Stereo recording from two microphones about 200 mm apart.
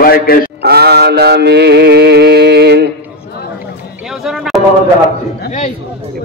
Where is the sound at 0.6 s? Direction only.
55° right (ahead or behind).